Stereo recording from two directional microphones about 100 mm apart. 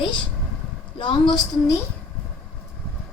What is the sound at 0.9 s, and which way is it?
Speech, 50° left (ahead or behind).